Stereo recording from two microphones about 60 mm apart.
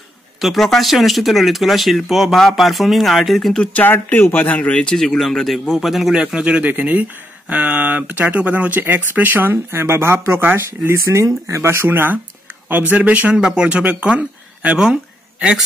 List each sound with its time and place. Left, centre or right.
0.4 s speech: centre
3.7 s speech: left
4.9 s speech: centre
6.3 s speech: centre; by 11.0 s right
11.2 s speech: right
13.4 s speech: centre